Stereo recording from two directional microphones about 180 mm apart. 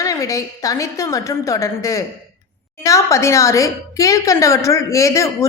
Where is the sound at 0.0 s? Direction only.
20° left (ahead or behind).